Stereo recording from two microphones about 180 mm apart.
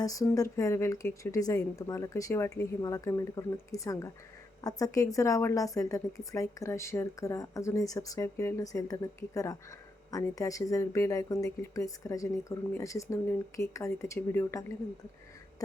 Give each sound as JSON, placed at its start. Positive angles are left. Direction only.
{"t": 0.0, "sound": "a woman's voice", "side_deg": 20}